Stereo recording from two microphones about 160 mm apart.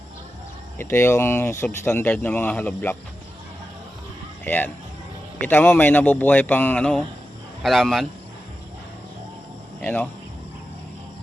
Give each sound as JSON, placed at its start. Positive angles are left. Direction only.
{"t": 0.8, "sound": "speech", "side_deg": 15}
{"t": 4.4, "sound": "speech", "side_deg": 10}
{"t": 9.8, "sound": "speech", "side_deg": 5}